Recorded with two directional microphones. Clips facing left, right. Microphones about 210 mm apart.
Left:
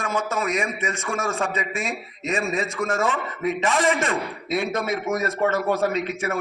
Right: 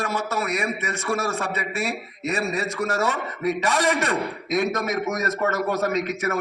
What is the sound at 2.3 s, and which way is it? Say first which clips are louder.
A man's voice: left 1 dB; 40° right (ahead or behind).